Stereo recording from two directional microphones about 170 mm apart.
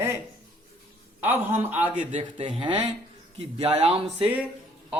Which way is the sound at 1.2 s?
10° right (ahead or behind).